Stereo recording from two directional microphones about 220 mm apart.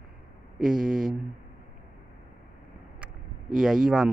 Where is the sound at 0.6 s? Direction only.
40° right (ahead or behind).